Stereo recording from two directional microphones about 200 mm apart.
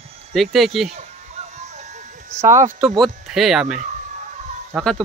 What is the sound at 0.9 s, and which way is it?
Music, 35° right (ahead or behind).